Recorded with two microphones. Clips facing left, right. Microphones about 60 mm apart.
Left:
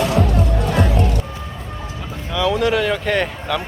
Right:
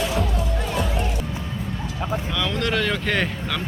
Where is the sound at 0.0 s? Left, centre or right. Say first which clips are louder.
Left 6 dB; left.